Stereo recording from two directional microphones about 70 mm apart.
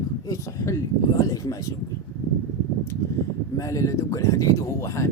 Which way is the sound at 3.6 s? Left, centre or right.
Left.